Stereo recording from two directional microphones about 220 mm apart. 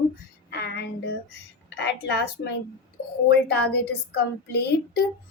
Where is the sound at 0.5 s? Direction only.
50° left (ahead or behind).